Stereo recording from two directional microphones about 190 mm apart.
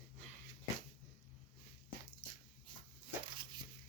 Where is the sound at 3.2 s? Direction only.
25° right (ahead or behind).